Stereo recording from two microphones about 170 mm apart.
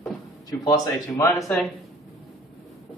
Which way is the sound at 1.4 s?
5° left (ahead or behind).